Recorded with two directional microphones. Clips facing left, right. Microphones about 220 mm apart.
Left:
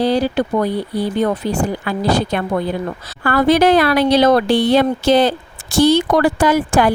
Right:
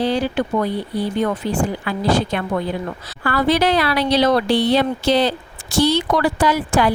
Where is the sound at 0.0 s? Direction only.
35° left (ahead or behind).